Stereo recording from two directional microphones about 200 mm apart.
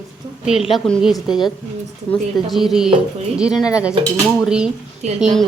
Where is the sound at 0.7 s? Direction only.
Centre (ahead or behind).